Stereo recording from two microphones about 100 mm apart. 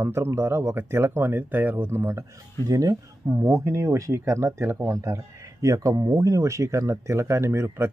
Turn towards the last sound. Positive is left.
turn(degrees=-25)  # may be behind; listen again after turning